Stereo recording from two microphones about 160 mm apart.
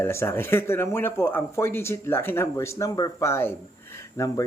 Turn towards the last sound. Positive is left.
turn(degrees=20)  # may be behind; listen again after turning